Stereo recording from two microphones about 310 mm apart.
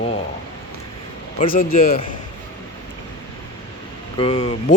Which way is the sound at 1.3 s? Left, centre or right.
Left.